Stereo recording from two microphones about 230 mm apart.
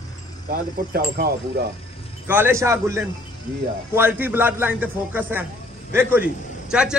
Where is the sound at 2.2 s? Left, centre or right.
Centre.